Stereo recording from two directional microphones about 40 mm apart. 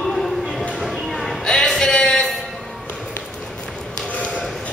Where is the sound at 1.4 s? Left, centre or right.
Centre.